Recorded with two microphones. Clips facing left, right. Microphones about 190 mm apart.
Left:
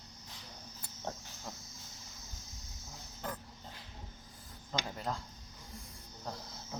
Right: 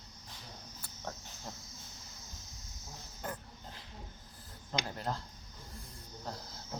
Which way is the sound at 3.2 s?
5° right (ahead or behind).